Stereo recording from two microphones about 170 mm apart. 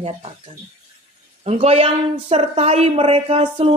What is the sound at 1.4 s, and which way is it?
A woman's voice, 40° right (ahead or behind).